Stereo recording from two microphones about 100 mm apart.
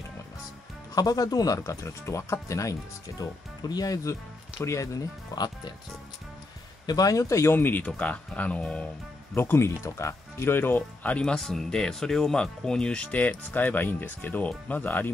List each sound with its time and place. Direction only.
0.9 s speech: 40° left (ahead or behind)
6.9 s speech: 35° left (ahead or behind); by 8.8 s 15° left (ahead or behind)
9.3 s speech: 25° left (ahead or behind)